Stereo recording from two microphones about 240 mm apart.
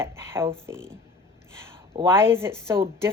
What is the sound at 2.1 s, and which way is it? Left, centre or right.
Speech, centre.